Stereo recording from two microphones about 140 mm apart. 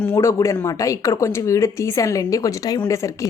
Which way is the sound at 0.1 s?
20° left (ahead or behind).